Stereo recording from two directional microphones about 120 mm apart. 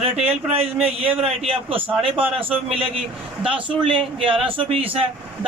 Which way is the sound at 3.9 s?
45° right (ahead or behind).